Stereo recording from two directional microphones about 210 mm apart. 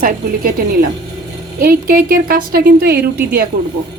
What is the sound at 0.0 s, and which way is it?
A woman's voice, 45° right (ahead or behind).